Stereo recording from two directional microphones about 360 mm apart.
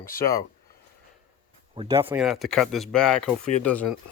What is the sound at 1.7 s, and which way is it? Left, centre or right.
Speech, centre.